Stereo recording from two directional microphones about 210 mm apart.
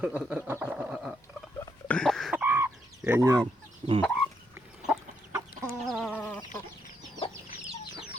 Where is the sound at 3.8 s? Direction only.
25° right (ahead or behind).